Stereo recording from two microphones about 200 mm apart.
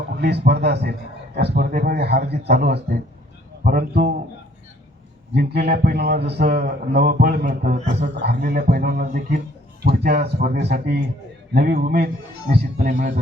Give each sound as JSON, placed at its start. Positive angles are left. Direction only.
{"t": 0.2, "sound": "a man's voice", "side_deg": -55}
{"t": 5.3, "sound": "a man's voice", "side_deg": -55}